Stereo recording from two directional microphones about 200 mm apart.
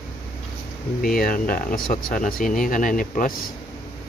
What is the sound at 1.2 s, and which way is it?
Speech, 45° left (ahead or behind).